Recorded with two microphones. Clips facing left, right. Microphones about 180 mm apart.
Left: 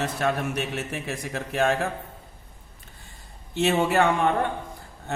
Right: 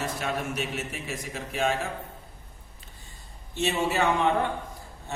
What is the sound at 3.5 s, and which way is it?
Speech, 60° left (ahead or behind).